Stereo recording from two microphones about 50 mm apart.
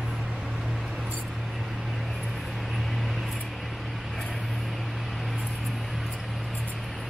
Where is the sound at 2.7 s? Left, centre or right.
Centre.